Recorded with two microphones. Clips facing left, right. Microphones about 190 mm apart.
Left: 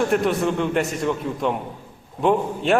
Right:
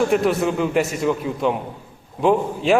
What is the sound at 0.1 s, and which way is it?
A man's voice, centre (ahead or behind).